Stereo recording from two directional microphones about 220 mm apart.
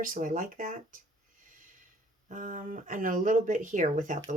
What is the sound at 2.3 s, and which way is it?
Speech, 35° right (ahead or behind).